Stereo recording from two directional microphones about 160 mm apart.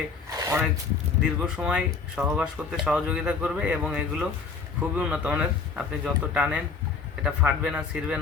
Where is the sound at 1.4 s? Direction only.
5° right (ahead or behind).